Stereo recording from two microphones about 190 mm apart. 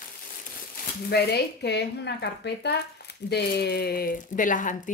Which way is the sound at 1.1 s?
60° left (ahead or behind).